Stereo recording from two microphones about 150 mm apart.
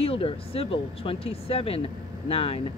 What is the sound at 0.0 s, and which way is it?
Speech, 40° left (ahead or behind).